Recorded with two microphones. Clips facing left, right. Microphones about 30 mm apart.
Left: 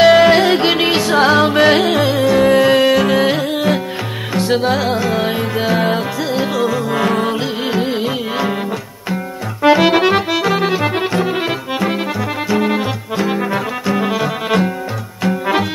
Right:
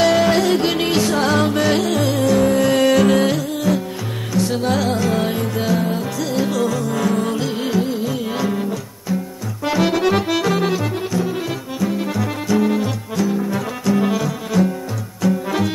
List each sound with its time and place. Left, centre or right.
0.0 s music: left
2.4 s music: left
2.7 s music: left
3.3 s music: left
4.6 s music: left
6.9 s music: left
9.1 s music: left
10.3 s accordion: left
11.0 s music: left
12.2 s music: left
14.5 s music: left
15.2 s music: left